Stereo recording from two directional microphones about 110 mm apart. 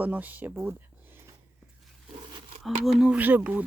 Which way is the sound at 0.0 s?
15° right (ahead or behind).